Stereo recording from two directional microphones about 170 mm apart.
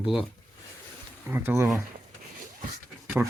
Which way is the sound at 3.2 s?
10° right (ahead or behind).